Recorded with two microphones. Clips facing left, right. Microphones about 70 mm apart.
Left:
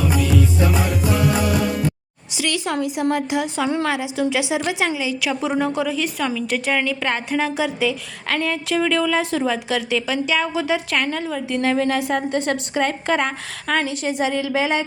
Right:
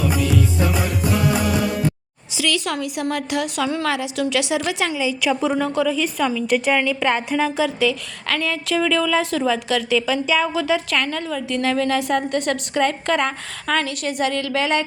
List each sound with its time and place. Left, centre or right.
3.1 s a woman's voice: left
4.9 s a woman's voice: centre
6.0 s a woman's voice: centre
13.8 s a woman's voice: left